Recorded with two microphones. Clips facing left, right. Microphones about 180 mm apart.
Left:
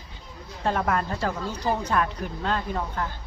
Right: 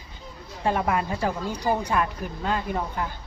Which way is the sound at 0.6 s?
10° right (ahead or behind).